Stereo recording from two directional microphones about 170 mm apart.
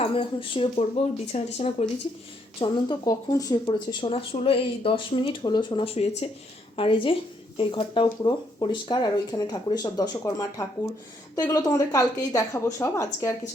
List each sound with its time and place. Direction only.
0.0 s speech: 30° left (ahead or behind)
2.6 s speech: 25° left (ahead or behind)